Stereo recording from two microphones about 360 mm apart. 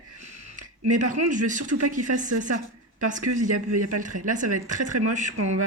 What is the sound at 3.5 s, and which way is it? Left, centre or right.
Speech, right.